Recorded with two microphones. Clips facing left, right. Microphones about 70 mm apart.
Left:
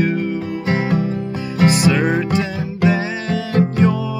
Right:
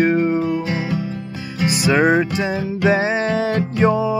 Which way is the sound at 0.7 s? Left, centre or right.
Left.